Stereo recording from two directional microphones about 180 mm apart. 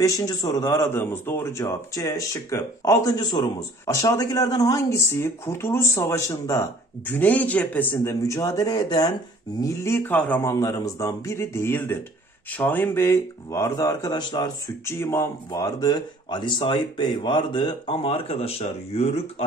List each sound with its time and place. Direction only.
0.0 s a man's voice: 20° left (ahead or behind); by 19.4 s 35° left (ahead or behind)